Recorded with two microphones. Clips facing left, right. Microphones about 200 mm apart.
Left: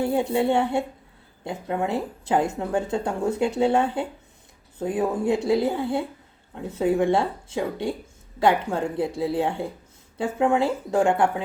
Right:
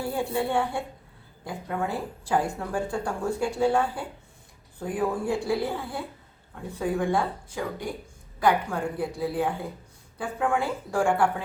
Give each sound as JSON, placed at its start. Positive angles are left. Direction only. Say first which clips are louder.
{"t": 0.0, "sound": "speech", "louder": "left 6 dB", "side_deg": 20}